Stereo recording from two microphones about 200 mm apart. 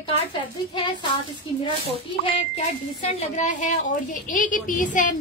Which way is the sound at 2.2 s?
35° left (ahead or behind).